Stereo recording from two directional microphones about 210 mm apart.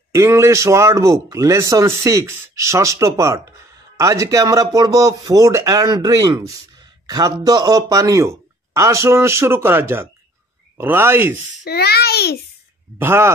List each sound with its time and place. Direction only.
0.1 s speech: 15° right (ahead or behind)
11.6 s a child's voice: 50° left (ahead or behind)
13.0 s speech: 10° right (ahead or behind)